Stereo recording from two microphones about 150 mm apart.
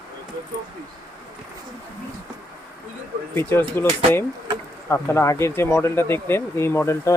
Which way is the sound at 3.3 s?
15° left (ahead or behind).